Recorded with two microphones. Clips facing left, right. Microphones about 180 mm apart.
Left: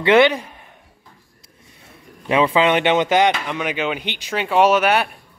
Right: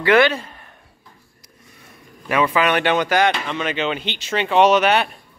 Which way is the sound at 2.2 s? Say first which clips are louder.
Left 2 dB; 25° left (ahead or behind).